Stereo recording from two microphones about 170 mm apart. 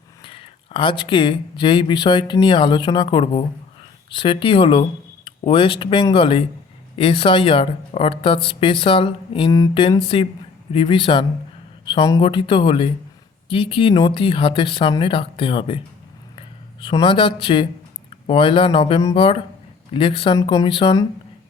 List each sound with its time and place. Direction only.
0.3 s a woman's voice: 30° left (ahead or behind)
16.8 s a woman's voice: 25° left (ahead or behind)